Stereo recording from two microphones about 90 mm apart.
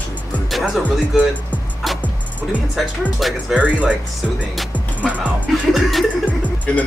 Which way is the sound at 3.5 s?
15° right (ahead or behind).